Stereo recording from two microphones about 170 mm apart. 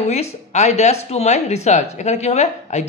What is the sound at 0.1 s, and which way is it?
Speech, 40° left (ahead or behind).